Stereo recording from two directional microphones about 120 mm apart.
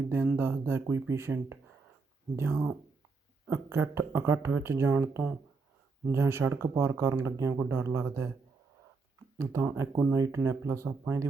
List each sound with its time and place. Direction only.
0.1 s speech: 15° right (ahead or behind)
9.4 s speech: 25° right (ahead or behind)